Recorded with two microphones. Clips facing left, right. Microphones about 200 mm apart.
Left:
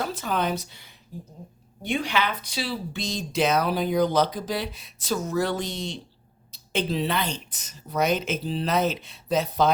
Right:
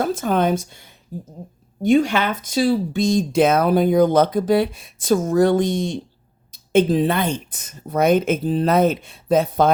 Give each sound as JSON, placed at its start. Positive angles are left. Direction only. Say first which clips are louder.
{"t": 0.0, "sound": "speech", "louder": "right 8 dB", "side_deg": -50}